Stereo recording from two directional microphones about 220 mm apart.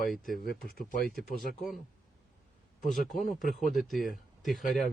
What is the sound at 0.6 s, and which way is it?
Speech, 40° left (ahead or behind).